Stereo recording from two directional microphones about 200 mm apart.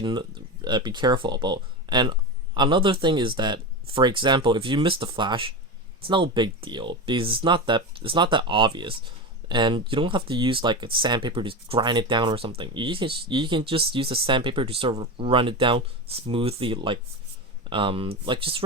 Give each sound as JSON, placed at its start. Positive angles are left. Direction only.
{"t": 0.0, "sound": "speech", "side_deg": -25}